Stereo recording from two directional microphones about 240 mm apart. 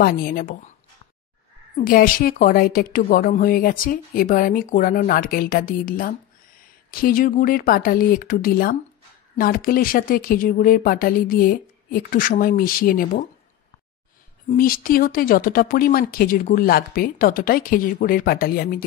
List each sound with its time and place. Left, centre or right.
0.0 s a woman's voice: left
1.8 s a woman's voice: left
14.5 s a woman's voice: left